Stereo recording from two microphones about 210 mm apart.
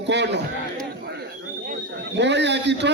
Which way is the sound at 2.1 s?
55° right (ahead or behind).